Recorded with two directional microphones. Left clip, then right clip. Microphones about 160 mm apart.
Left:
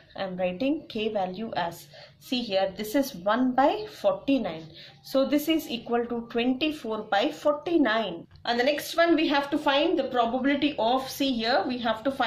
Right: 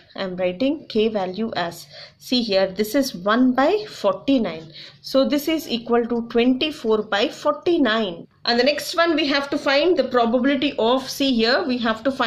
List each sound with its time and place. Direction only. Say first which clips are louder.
0.2 s a woman's voice: right 6 dB; 40° right (ahead or behind)